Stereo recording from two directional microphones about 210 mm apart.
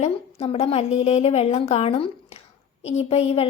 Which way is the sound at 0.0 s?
30° left (ahead or behind).